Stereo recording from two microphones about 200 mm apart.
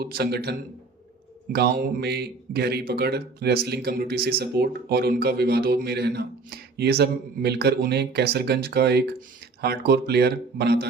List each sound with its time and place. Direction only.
0.0 s speech: 55° right (ahead or behind)
1.5 s speech: 55° right (ahead or behind)